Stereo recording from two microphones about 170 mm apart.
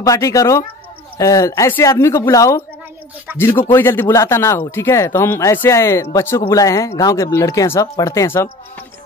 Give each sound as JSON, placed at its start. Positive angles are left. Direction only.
{"t": 0.0, "sound": "speech", "side_deg": 20}